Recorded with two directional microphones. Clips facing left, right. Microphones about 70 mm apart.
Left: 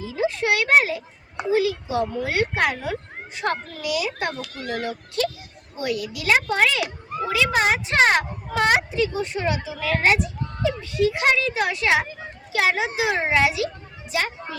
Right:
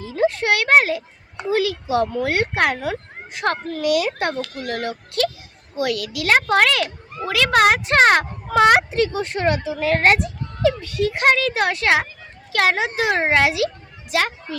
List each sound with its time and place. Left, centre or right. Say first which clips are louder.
0.0 s a child's voice: right 4 dB; right
5.7 s a woman's voice: right 4 dB; right
10.6 s speech: right 2 dB; right
14.1 s a woman's voice: right 4 dB; right